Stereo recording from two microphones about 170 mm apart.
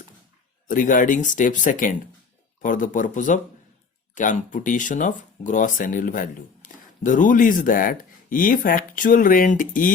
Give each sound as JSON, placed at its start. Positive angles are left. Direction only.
{"t": 0.7, "sound": "speech", "side_deg": 50}